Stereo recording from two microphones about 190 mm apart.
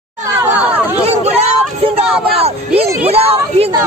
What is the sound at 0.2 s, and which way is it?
Chatter, 15° right (ahead or behind).